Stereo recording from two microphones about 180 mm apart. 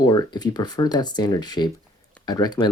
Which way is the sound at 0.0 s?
20° left (ahead or behind).